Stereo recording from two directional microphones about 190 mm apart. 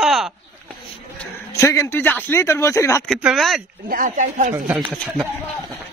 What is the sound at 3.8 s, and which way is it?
Speech, 45° right (ahead or behind).